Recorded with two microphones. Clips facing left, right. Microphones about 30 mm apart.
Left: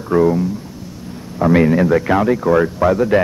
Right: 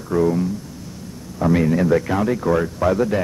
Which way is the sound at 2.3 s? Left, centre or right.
Centre.